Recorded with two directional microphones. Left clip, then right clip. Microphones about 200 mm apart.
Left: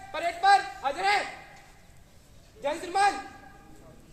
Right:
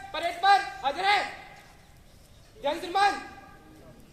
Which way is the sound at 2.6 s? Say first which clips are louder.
Right 1 dB; 10° left (ahead or behind).